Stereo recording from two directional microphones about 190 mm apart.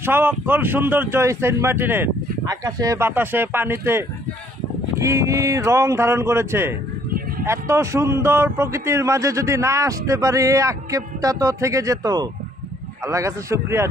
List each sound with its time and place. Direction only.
0.0 s speech: 10° right (ahead or behind)